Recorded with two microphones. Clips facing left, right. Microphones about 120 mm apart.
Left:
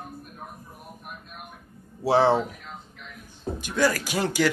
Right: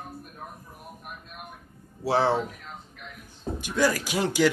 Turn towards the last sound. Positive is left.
turn(degrees=-15)  # may be behind; listen again after turning